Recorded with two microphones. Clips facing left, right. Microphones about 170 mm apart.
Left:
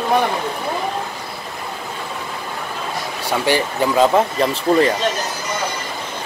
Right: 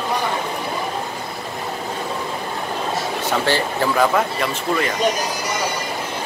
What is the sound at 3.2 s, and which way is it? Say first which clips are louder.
Speech: left 3 dB; 15° left (ahead or behind).